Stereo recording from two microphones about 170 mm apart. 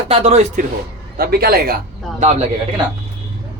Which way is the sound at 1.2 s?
65° right (ahead or behind).